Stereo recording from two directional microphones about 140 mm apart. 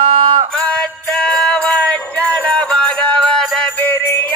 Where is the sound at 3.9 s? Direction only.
15° left (ahead or behind).